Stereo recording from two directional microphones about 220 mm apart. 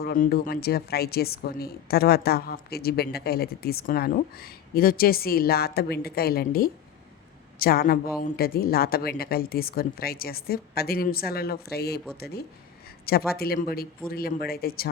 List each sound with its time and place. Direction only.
0.0 s speech: 45° left (ahead or behind)